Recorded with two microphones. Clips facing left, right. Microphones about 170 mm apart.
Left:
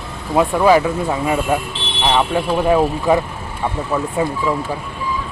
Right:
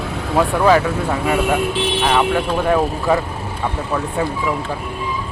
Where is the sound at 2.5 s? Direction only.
10° left (ahead or behind).